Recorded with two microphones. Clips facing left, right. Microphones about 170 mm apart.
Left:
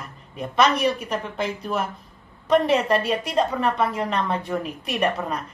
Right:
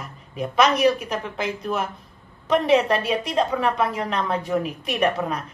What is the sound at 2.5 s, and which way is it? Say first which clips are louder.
A woman's voice: right 1 dB; centre (ahead or behind).